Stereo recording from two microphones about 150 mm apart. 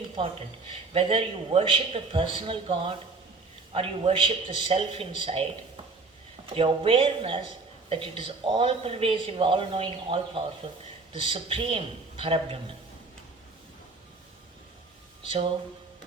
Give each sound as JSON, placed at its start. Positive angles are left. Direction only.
{"t": 0.2, "sound": "speech", "side_deg": -35}